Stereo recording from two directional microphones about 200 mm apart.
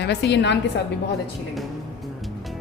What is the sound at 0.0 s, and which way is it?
Speech, 60° left (ahead or behind).